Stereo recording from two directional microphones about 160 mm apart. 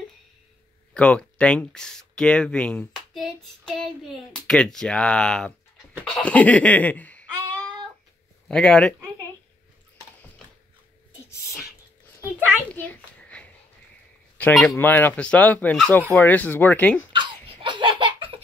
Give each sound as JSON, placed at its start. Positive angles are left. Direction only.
{"t": 0.9, "sound": "speech", "side_deg": 5}
{"t": 6.0, "sound": "laughter", "side_deg": 5}
{"t": 8.5, "sound": "speech", "side_deg": 5}
{"t": 12.2, "sound": "a sound", "side_deg": -10}
{"t": 12.7, "sound": "a sound", "side_deg": 10}
{"t": 14.4, "sound": "speech", "side_deg": 0}
{"t": 17.1, "sound": "laughter", "side_deg": -30}